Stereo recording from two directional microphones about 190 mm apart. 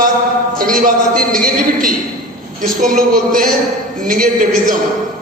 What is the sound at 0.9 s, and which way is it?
A man's voice, 50° right (ahead or behind).